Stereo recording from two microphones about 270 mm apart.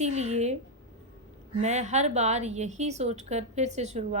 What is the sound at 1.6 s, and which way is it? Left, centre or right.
A woman's voice, right.